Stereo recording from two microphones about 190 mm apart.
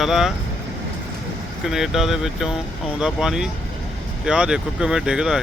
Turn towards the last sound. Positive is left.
turn(degrees=-5)  # may be behind; listen again after turning